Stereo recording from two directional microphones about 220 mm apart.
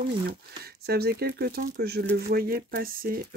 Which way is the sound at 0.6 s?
45° right (ahead or behind).